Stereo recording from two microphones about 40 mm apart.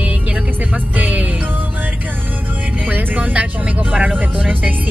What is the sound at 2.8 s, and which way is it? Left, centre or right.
Music, right.